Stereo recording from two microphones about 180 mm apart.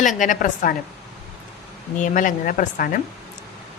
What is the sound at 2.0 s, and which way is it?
Speech, 45° left (ahead or behind).